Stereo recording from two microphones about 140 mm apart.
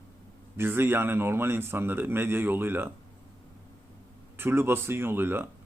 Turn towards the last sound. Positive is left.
turn(degrees=-15)  # may be behind; listen again after turning